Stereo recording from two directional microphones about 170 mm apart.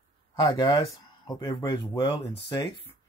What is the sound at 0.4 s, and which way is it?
Speech, 20° left (ahead or behind).